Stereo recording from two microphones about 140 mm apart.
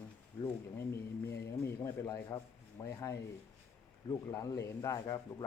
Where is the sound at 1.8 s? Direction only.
25° left (ahead or behind).